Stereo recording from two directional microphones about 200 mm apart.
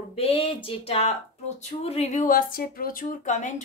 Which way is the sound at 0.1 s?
30° left (ahead or behind).